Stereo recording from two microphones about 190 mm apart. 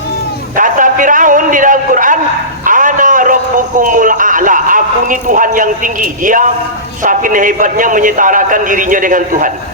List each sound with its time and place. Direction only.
0.5 s a man's voice: 45° right (ahead or behind)
2.6 s dog: 45° right (ahead or behind)
3.8 s a man's voice: 45° right (ahead or behind)